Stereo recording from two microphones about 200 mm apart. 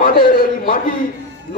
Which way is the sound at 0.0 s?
45° left (ahead or behind).